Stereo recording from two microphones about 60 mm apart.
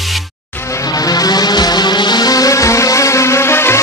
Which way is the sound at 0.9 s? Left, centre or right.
Left.